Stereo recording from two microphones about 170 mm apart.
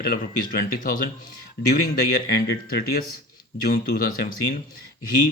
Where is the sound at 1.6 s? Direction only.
90° left.